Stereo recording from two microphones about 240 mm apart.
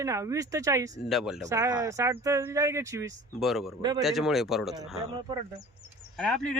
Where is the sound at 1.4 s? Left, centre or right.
Centre.